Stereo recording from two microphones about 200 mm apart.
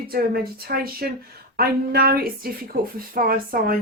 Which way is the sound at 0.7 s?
50° right (ahead or behind).